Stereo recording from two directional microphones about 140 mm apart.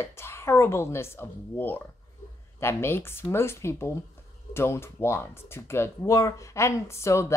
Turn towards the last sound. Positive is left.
turn(degrees=20)  # may be behind; listen again after turning